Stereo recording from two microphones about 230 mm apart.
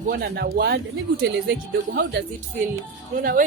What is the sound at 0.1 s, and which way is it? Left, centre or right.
Speech, right.